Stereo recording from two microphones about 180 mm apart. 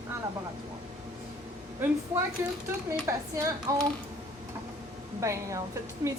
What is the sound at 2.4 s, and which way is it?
A woman's voice, 15° right (ahead or behind).